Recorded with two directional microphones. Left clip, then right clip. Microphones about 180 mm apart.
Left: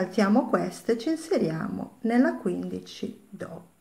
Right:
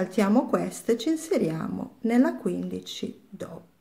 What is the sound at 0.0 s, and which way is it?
Speech, 20° right (ahead or behind).